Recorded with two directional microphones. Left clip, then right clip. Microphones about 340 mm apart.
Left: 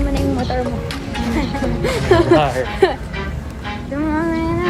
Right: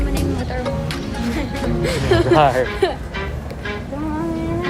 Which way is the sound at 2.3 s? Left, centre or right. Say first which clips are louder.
Right 1 dB; centre.